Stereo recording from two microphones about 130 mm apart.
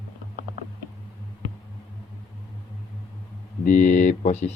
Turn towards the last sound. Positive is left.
turn(degrees=65)  # may be behind; listen again after turning